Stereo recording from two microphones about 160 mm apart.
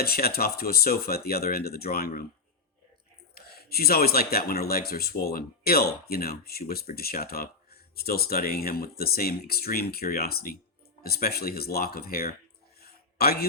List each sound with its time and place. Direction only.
0.0 s speech: 75° left (ahead or behind)
3.3 s speech: 75° left (ahead or behind)
12.8 s a sound: 75° left (ahead or behind)